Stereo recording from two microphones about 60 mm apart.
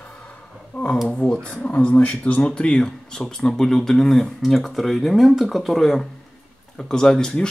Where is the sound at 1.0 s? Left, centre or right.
Left.